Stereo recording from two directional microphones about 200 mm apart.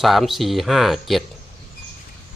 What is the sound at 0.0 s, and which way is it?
Speech, centre (ahead or behind).